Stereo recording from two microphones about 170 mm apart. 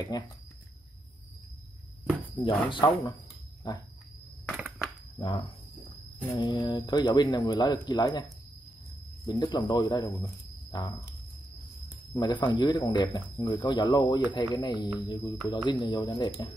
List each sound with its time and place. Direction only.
0.1 s speech: 25° left (ahead or behind)
2.7 s speech: 25° left (ahead or behind)
4.5 s a sound: 5° right (ahead or behind)
5.2 s speech: 25° left (ahead or behind)
12.1 s speech: 25° left (ahead or behind)